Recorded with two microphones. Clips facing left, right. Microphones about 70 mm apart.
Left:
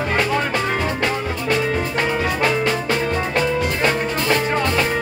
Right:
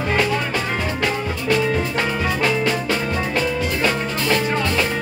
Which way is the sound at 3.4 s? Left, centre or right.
Left.